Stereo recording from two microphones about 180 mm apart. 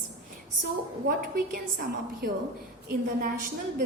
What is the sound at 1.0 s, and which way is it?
A woman's voice, 55° right (ahead or behind).